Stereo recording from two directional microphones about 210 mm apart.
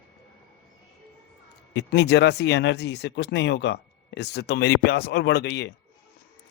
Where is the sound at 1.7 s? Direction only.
50° left (ahead or behind).